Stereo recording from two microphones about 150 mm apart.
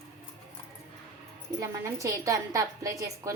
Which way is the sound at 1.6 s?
20° right (ahead or behind).